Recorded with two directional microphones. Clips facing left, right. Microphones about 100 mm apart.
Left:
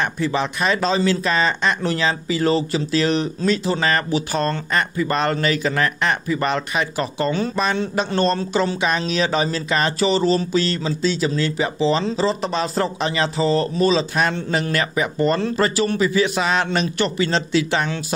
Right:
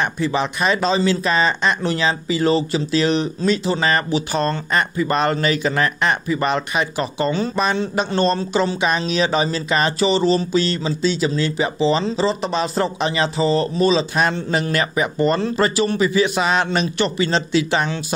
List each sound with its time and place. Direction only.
0.2 s speech: 10° right (ahead or behind)
12.2 s speech: centre (ahead or behind)
14.7 s speech: 20° right (ahead or behind)
16.7 s speech: 5° right (ahead or behind)
17.3 s speech: 15° right (ahead or behind)